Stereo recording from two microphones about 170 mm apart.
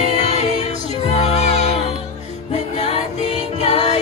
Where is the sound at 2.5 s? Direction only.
40° left (ahead or behind).